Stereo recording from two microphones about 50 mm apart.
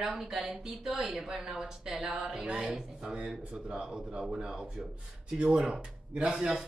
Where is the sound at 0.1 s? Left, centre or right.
Centre; by 6.3 s right.